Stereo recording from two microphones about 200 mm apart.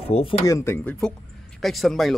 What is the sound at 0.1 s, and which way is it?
Speech, 30° left (ahead or behind).